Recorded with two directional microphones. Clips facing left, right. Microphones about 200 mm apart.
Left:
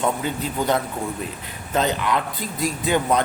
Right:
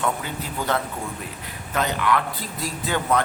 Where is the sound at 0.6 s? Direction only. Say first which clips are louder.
Left 3 dB; 15° left (ahead or behind).